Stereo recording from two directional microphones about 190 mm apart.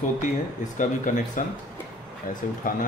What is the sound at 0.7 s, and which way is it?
Speech, 45° left (ahead or behind).